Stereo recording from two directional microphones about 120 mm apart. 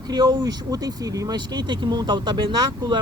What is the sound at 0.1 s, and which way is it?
Speech, 35° right (ahead or behind).